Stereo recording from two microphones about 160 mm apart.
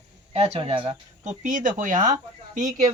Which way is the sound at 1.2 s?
50° right (ahead or behind).